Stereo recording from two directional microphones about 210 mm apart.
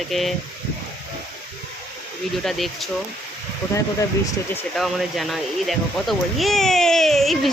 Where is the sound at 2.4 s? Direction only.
Centre (ahead or behind).